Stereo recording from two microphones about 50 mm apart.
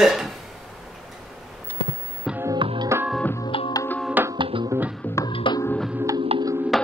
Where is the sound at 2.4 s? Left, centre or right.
Right.